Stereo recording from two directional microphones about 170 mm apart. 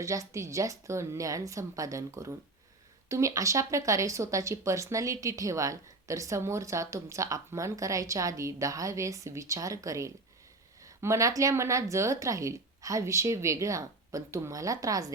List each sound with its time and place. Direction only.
0.0 s speech: 20° right (ahead or behind)